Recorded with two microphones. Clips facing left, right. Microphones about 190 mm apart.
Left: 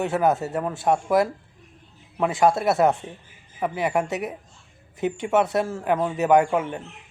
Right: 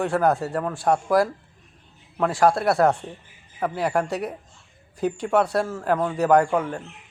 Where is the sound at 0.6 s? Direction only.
20° left (ahead or behind).